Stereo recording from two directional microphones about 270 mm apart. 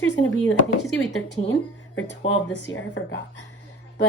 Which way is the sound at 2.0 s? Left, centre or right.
Left.